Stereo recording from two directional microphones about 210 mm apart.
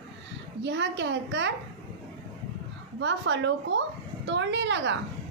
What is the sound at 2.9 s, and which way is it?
A woman's voice, 60° right (ahead or behind).